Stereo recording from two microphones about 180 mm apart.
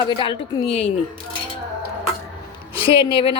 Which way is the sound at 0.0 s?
30° left (ahead or behind).